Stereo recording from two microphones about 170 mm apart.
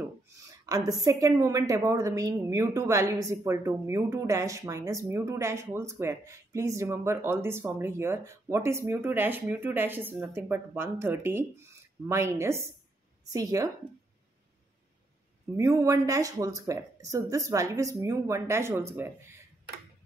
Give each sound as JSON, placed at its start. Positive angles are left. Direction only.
{"t": 0.0, "sound": "a woman's voice", "side_deg": -20}
{"t": 15.5, "sound": "speech", "side_deg": -15}